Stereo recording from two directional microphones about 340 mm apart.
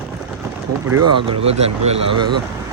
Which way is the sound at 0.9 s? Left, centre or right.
Right.